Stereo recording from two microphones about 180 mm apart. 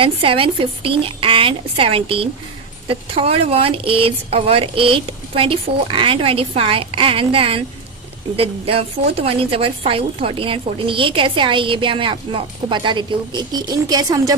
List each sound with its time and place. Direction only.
0.0 s a woman's voice: 30° right (ahead or behind)